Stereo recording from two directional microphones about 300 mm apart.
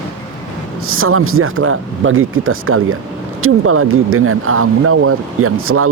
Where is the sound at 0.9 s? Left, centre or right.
Right.